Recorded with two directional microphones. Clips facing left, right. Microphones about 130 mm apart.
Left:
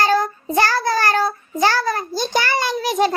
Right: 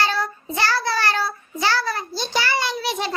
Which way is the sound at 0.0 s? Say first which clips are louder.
Left 6 dB; 45° left (ahead or behind).